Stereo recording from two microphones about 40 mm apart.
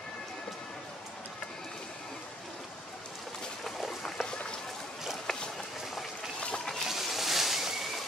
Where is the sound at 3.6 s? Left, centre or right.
Centre.